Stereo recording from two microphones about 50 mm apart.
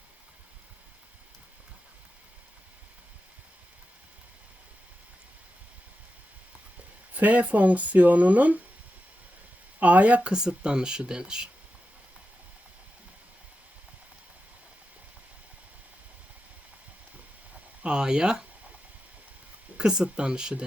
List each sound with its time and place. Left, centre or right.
7.2 s speech: right
9.8 s speech: right
10.3 s speech: centre
17.8 s speech: centre
19.7 s speech: centre